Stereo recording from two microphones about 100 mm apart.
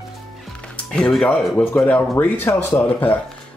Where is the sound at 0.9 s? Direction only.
5° left (ahead or behind).